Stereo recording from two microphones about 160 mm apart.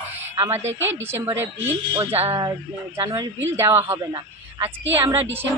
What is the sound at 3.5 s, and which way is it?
Speech, 15° right (ahead or behind).